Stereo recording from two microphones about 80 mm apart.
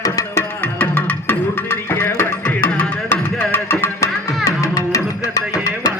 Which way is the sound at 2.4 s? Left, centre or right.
Centre.